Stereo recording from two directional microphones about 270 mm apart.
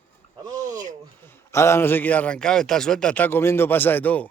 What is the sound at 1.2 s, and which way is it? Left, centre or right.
A man's voice, centre.